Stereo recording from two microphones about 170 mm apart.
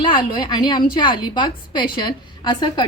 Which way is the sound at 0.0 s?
25° left (ahead or behind).